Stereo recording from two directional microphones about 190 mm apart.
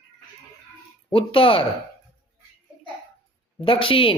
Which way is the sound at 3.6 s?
30° left (ahead or behind).